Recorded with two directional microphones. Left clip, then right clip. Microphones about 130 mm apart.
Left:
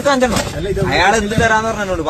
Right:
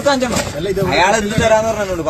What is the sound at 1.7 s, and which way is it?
Speech, 10° left (ahead or behind).